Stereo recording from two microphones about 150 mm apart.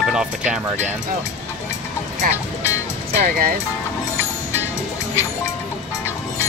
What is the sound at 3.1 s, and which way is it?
Speech, 70° right (ahead or behind).